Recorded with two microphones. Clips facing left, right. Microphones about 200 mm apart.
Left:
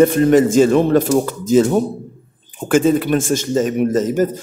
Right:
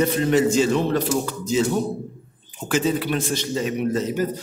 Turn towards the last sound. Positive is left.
turn(degrees=45)  # may be behind; listen again after turning